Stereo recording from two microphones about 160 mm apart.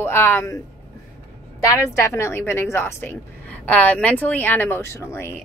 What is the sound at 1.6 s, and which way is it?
A woman's voice, 20° left (ahead or behind).